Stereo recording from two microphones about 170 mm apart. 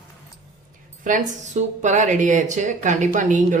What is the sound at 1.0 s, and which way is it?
Speech, 50° right (ahead or behind).